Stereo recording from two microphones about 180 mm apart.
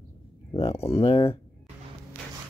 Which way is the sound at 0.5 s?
35° left (ahead or behind).